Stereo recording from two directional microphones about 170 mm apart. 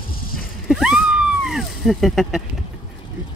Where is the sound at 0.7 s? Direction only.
5° right (ahead or behind).